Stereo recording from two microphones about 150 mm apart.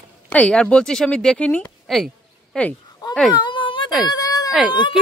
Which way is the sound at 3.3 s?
30° left (ahead or behind).